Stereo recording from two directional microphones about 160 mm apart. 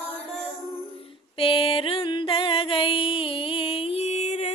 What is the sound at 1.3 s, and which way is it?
Music, 35° left (ahead or behind).